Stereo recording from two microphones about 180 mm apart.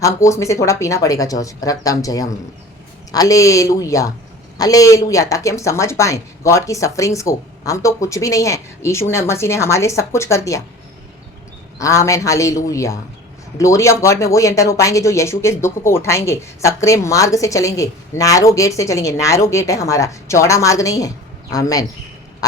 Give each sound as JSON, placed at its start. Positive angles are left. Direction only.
{"t": 0.0, "sound": "speech", "side_deg": 15}
{"t": 11.8, "sound": "speech", "side_deg": 15}